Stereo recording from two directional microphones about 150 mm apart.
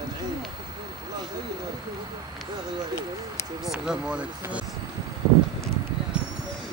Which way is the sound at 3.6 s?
5° right (ahead or behind).